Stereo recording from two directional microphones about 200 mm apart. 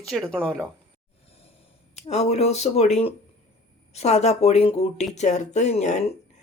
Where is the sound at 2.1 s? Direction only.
30° left (ahead or behind).